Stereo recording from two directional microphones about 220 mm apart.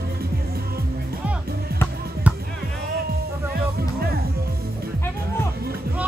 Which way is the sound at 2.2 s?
5° right (ahead or behind).